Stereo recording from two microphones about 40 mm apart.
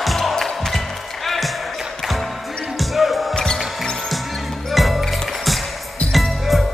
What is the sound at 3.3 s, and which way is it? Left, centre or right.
Music, centre.